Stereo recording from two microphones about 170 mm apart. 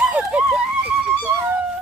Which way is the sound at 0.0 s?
5° right (ahead or behind).